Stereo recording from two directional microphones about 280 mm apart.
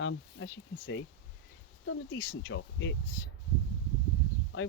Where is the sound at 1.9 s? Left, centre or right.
Left.